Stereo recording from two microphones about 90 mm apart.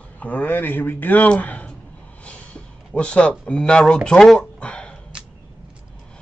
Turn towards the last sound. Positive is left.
turn(degrees=10)  # may be behind; listen again after turning